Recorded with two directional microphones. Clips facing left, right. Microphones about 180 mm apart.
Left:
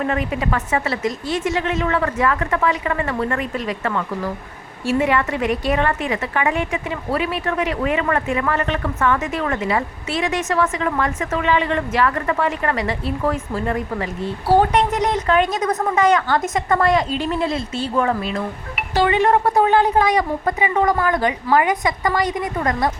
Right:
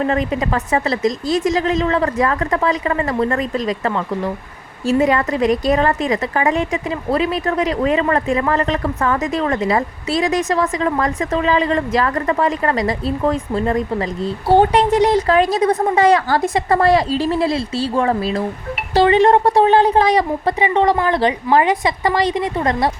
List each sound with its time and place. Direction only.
0.0 s a woman's voice: 30° right (ahead or behind)